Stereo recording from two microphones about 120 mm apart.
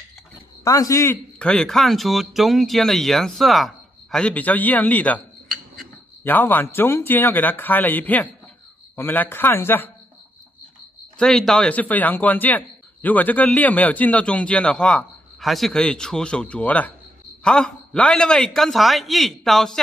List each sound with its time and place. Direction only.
0.7 s a man's voice: 25° left (ahead or behind)
1.4 s speech: 5° left (ahead or behind)
6.2 s a man's voice: 15° left (ahead or behind)
11.1 s a man's voice: 5° left (ahead or behind)